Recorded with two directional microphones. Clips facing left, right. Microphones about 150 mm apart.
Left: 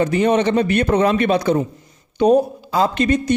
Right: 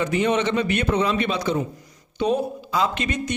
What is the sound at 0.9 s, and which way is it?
Speech, 55° left (ahead or behind).